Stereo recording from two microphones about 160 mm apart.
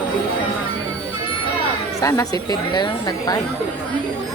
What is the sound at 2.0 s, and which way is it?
Speech, 20° left (ahead or behind).